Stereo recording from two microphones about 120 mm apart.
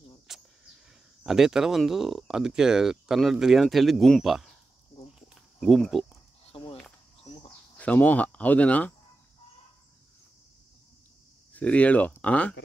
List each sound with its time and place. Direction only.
0.3 s a sound: 5° right (ahead or behind)
1.2 s speech: 5° right (ahead or behind)
5.3 s cricket: centre (ahead or behind)
6.5 s a sound: 50° left (ahead or behind)
7.7 s speech: 10° left (ahead or behind)
11.5 s speech: 10° left (ahead or behind)